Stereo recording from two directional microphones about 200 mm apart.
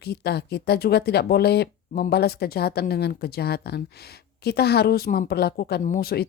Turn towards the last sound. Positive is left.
turn(degrees=50)  # may be behind; listen again after turning